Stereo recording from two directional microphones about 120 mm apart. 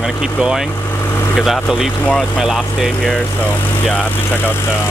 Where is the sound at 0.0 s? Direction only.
5° right (ahead or behind).